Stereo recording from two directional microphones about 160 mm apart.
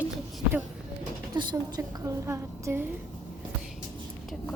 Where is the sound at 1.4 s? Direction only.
25° right (ahead or behind).